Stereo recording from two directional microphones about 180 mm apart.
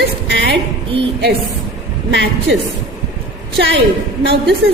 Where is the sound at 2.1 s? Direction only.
80° right.